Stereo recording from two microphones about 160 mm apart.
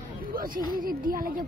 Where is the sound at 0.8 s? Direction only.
65° right (ahead or behind).